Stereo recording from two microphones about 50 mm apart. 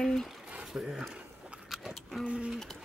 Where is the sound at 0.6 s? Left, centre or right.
Centre.